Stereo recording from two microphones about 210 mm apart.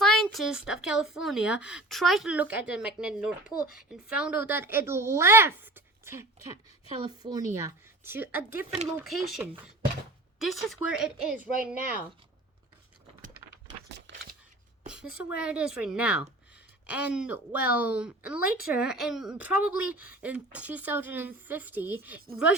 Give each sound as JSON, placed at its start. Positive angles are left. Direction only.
{"t": 0.0, "sound": "a woman's voice", "side_deg": 0}
{"t": 14.1, "sound": "a sound", "side_deg": -60}
{"t": 15.1, "sound": "a woman's voice", "side_deg": -5}